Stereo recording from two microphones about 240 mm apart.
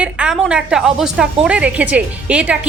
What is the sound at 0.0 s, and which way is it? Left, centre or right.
A woman's voice, centre.